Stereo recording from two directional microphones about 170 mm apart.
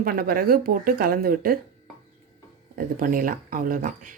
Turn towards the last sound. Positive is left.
turn(degrees=-50)  # may be behind; listen again after turning